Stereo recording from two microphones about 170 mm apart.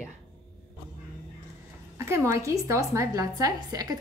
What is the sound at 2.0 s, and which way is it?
A woman's voice, 15° right (ahead or behind).